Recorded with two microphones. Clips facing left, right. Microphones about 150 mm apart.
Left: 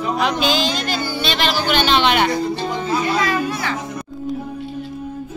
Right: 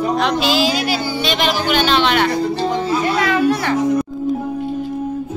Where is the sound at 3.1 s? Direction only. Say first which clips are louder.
Right 4 dB; 65° right (ahead or behind).